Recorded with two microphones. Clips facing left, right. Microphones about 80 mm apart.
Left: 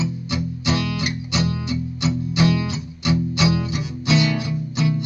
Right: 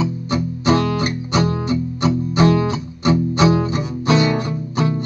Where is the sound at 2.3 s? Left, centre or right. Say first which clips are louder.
Right 5 dB; right.